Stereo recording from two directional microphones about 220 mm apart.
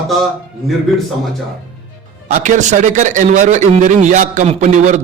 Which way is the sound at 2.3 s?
35° right (ahead or behind).